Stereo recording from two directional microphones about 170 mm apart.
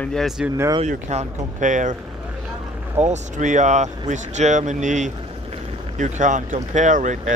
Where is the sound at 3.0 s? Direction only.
45° right (ahead or behind).